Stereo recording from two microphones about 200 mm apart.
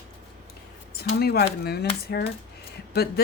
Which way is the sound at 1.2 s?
55° left (ahead or behind).